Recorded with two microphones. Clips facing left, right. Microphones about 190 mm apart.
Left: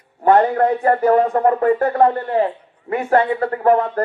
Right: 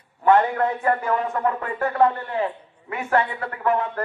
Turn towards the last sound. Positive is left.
turn(degrees=40)  # may be behind; listen again after turning